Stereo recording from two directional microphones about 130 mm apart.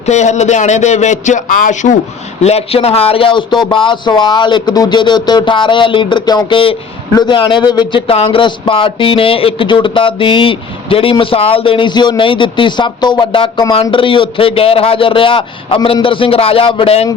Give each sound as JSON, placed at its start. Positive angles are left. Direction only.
{"t": 0.0, "sound": "speech", "side_deg": 65}
{"t": 2.4, "sound": "a man's voice", "side_deg": 55}